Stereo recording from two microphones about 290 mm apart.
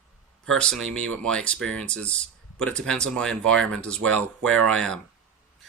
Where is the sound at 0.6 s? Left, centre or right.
Centre.